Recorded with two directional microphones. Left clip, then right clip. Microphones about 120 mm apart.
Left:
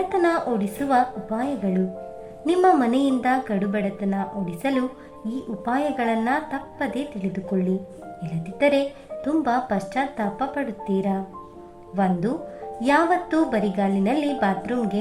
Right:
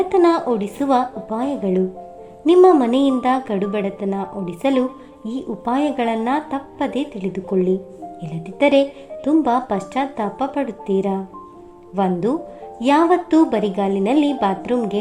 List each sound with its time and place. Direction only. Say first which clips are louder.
0.1 s a woman's voice: right 6 dB; 25° right (ahead or behind)
2.6 s a woman's voice: right 5 dB; 15° right (ahead or behind); by 14.8 s 30° right (ahead or behind)